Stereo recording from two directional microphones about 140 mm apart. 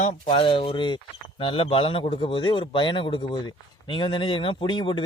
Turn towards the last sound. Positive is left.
turn(degrees=35)  # may be behind; listen again after turning